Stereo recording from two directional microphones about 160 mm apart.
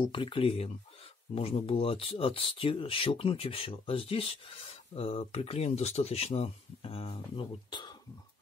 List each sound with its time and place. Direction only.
0.0 s speech: 30° left (ahead or behind)